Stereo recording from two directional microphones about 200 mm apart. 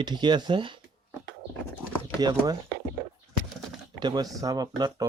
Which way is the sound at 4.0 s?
20° right (ahead or behind).